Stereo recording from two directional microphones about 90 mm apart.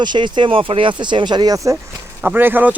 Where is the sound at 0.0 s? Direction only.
55° right (ahead or behind).